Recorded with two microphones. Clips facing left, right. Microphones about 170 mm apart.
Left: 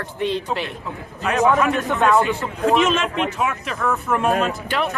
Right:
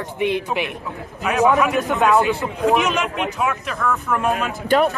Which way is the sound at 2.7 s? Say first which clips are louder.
Left 4 dB; centre (ahead or behind).